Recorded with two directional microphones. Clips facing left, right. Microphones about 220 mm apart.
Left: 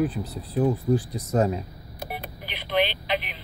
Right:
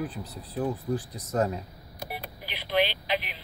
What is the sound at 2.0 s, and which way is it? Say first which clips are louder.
Telephone: left 3 dB; 55° left (ahead or behind).